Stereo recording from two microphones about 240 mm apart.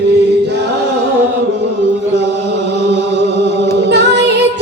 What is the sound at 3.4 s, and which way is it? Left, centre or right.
Music, right.